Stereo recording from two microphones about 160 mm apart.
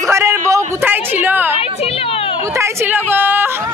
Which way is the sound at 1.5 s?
40° left (ahead or behind).